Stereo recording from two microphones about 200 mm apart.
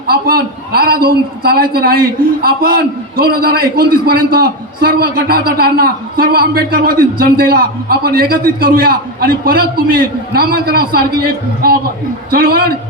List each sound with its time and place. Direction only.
0.1 s a man's voice: 50° right (ahead or behind)